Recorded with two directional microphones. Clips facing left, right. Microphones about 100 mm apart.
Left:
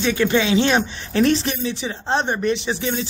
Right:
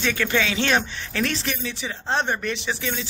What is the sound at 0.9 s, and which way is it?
Speech, 30° left (ahead or behind).